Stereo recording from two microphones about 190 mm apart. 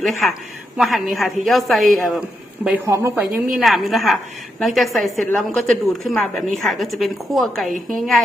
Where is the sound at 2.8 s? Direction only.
15° right (ahead or behind).